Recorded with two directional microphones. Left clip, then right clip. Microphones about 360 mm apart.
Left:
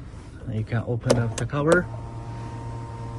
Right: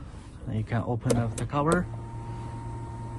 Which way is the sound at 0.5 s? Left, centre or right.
Centre.